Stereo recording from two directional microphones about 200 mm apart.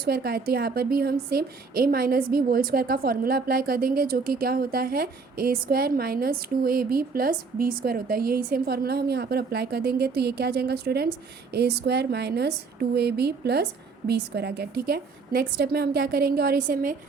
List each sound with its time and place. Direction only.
0.0 s a woman's voice: 50° right (ahead or behind)